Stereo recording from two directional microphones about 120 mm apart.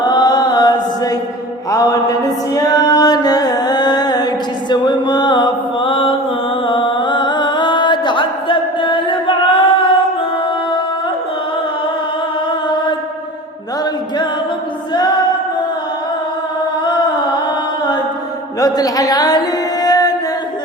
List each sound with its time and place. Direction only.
0.0 s chant: 35° left (ahead or behind)
1.7 s music: 30° left (ahead or behind)
16.8 s music: 40° left (ahead or behind)
18.6 s music: 30° left (ahead or behind)